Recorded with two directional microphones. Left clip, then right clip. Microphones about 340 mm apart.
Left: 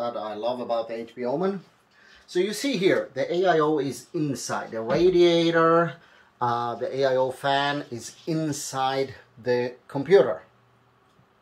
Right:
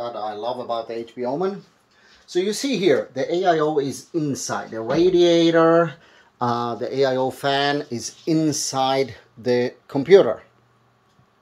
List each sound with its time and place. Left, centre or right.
0.4 s speech: right